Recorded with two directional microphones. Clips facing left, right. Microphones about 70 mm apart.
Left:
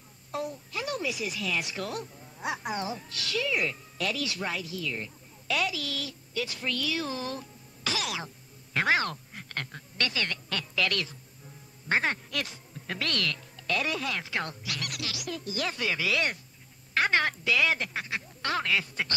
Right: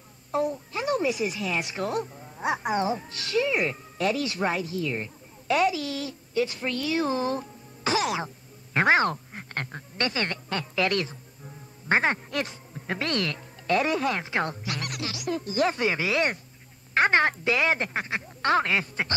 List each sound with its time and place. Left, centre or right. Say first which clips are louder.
0.3 s a woman's voice: right 7 dB; right